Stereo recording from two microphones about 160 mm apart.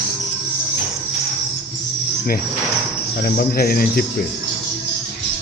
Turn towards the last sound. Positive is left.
turn(degrees=70)  # may be behind; listen again after turning